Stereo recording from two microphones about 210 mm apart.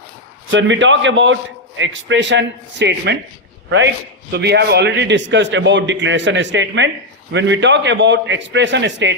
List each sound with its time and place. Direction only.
0.5 s a man's voice: 60° right (ahead or behind)